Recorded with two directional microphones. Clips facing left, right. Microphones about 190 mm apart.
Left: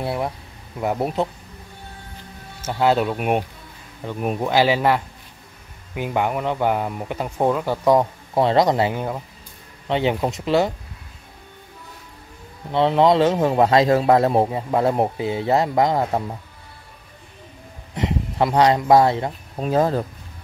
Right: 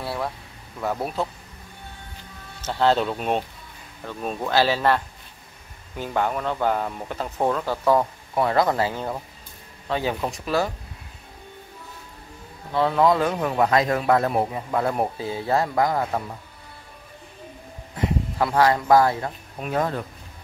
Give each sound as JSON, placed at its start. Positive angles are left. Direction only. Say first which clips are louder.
{"t": 0.0, "sound": "a sound", "louder": "left 4 dB", "side_deg": 20}
{"t": 0.7, "sound": "a man's voice", "louder": "left 4 dB", "side_deg": 20}
{"t": 2.6, "sound": "a man's voice", "louder": "left 2 dB", "side_deg": 10}
{"t": 12.7, "sound": "a man's voice", "louder": "left 4 dB", "side_deg": 25}
{"t": 17.9, "sound": "speech", "louder": "left 2 dB", "side_deg": 25}